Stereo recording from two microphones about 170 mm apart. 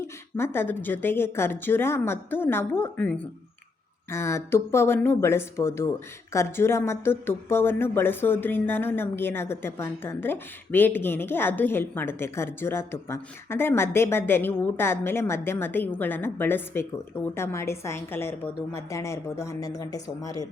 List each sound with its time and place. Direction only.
0.3 s a woman's voice: 15° left (ahead or behind)